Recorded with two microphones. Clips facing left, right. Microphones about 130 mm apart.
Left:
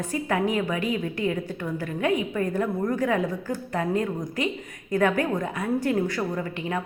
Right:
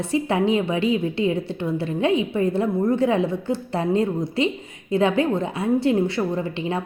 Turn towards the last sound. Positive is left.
turn(degrees=-25)  # may be behind; listen again after turning